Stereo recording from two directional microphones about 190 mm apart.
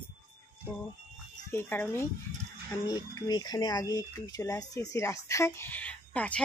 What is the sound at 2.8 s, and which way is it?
Speech, 20° left (ahead or behind).